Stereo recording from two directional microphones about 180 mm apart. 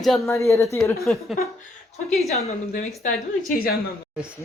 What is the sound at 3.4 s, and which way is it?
Speech, 55° left (ahead or behind).